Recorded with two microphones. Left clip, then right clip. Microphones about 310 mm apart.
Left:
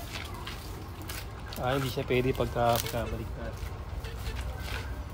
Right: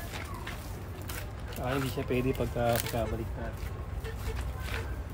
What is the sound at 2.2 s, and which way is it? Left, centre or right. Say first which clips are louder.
Speech: left 3 dB; left.